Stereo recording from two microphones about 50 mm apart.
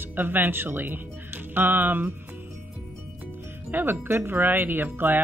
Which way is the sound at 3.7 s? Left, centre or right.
Right.